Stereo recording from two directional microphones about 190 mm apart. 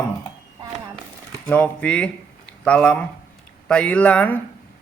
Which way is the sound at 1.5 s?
5° left (ahead or behind).